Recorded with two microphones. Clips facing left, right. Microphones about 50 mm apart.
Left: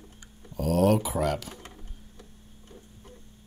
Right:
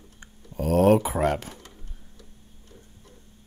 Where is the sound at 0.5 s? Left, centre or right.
Right.